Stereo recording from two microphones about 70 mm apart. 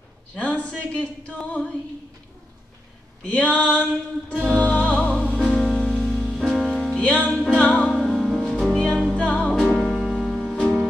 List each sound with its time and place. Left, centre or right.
0.3 s speech: left
3.3 s speech: centre
4.5 s music: centre
5.4 s music: centre
7.8 s music: centre
8.7 s music: centre
9.7 s music: centre